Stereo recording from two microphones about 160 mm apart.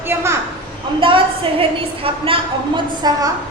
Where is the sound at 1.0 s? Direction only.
30° right (ahead or behind).